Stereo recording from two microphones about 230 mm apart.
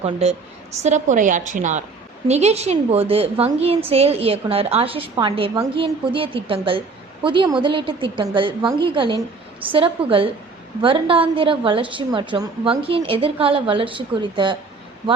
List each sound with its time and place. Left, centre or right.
0.0 s a woman's voice: right